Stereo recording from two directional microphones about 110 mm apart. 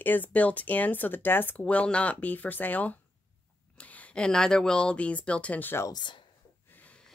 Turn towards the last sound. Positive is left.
turn(degrees=15)  # may be behind; listen again after turning